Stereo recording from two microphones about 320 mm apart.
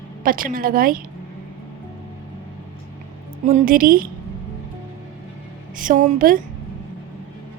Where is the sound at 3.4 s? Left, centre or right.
Right.